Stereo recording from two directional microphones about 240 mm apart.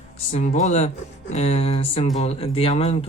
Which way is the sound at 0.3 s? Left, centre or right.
Left.